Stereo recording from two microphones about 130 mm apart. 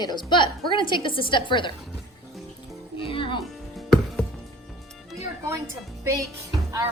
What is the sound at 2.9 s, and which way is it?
Music, 40° left (ahead or behind).